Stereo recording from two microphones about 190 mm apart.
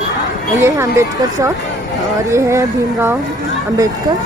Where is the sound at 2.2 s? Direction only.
15° right (ahead or behind).